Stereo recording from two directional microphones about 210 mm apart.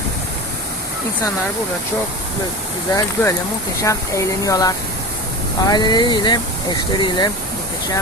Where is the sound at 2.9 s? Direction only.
15° left (ahead or behind).